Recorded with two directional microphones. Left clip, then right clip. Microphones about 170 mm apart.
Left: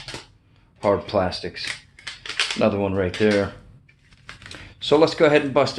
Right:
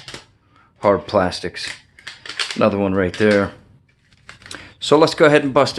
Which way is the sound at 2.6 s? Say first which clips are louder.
Right 6 dB; 40° right (ahead or behind).